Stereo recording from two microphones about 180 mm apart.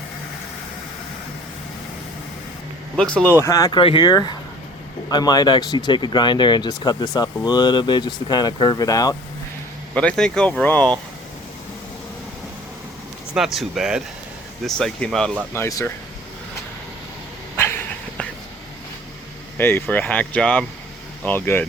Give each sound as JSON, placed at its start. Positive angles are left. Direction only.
{"t": 2.9, "sound": "speech", "side_deg": 5}
{"t": 3.3, "sound": "speech", "side_deg": 15}
{"t": 9.9, "sound": "speech", "side_deg": 5}
{"t": 13.3, "sound": "speech", "side_deg": 0}
{"t": 15.5, "sound": "speech", "side_deg": 15}
{"t": 17.6, "sound": "dog", "side_deg": 15}
{"t": 19.5, "sound": "speech", "side_deg": 10}